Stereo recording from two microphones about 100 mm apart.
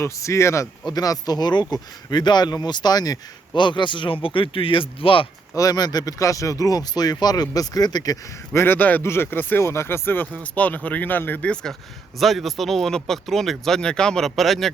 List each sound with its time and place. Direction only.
0.0 s speech: 30° left (ahead or behind); by 5.3 s 60° left (ahead or behind)
5.5 s speech: 40° left (ahead or behind)
8.5 s speech: 20° left (ahead or behind)
12.2 s speech: centre (ahead or behind)